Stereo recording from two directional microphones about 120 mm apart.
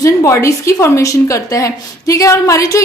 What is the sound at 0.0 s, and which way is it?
A woman's voice, 25° left (ahead or behind).